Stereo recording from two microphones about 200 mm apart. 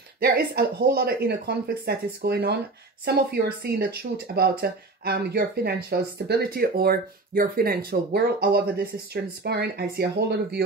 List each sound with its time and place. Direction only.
0.2 s speech: 50° right (ahead or behind)